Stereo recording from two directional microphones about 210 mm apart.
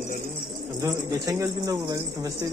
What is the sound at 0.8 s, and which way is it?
Speech, 15° right (ahead or behind).